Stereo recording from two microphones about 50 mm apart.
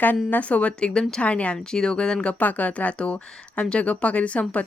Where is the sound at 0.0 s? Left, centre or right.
Left.